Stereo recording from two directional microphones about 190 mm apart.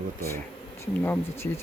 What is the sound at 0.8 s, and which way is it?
Speech, 15° left (ahead or behind).